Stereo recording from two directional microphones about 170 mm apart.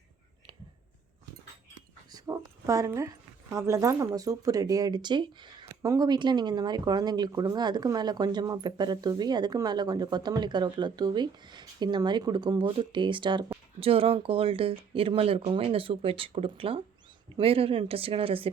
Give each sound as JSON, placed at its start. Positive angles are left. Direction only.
{"t": 2.0, "sound": "dog", "side_deg": -20}
{"t": 3.5, "sound": "speech", "side_deg": -15}